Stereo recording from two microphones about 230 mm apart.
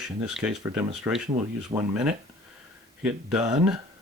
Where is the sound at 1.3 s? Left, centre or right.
Right.